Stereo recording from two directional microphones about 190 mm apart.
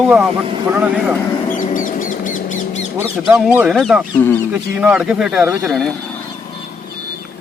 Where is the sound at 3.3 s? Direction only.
5° right (ahead or behind).